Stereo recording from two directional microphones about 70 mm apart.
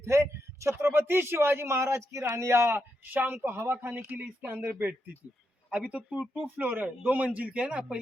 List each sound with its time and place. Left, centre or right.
0.0 s speech: right
4.0 s a man's voice: right
5.7 s a man's voice: centre